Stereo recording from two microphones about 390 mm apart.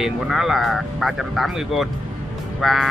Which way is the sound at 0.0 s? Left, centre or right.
Centre.